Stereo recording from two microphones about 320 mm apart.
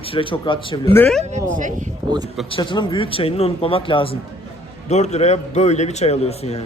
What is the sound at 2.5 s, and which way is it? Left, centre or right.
A man's voice, centre.